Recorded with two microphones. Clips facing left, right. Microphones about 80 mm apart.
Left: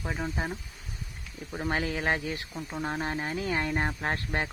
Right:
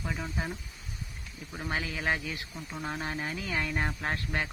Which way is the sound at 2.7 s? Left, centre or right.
Left.